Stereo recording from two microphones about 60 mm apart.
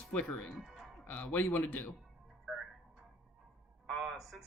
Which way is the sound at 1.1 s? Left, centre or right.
Left.